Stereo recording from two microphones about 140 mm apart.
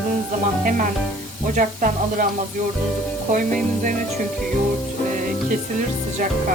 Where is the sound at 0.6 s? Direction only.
75° right (ahead or behind).